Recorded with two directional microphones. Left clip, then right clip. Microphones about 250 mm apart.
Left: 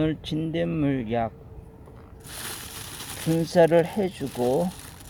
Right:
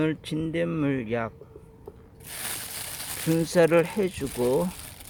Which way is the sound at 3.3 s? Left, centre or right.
Right.